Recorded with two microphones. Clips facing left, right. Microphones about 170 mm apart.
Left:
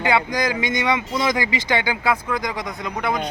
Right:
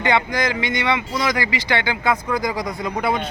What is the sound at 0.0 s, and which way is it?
Speech, 10° left (ahead or behind).